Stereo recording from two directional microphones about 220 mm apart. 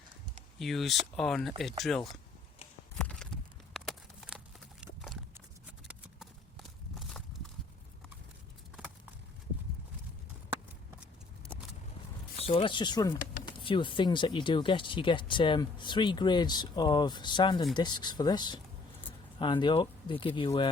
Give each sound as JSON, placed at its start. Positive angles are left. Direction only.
{"t": 0.6, "sound": "speech", "side_deg": 0}
{"t": 3.0, "sound": "a sound", "side_deg": 5}
{"t": 4.8, "sound": "clip-clop", "side_deg": -5}
{"t": 12.4, "sound": "speech", "side_deg": 25}